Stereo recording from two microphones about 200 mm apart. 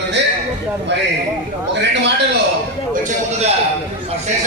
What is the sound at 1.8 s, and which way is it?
Speech, 60° right (ahead or behind).